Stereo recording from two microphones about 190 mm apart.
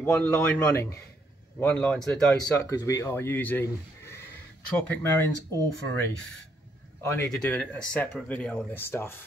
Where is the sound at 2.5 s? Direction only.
15° left (ahead or behind).